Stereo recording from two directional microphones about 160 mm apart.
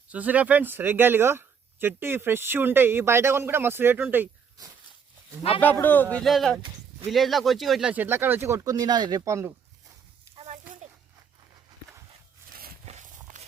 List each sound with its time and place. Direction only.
0.1 s speech: 10° right (ahead or behind)
5.8 s speech: 10° left (ahead or behind); by 9.5 s 20° right (ahead or behind)
12.8 s a sound: 45° right (ahead or behind)